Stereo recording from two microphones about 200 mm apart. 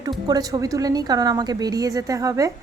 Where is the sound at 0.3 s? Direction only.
20° right (ahead or behind).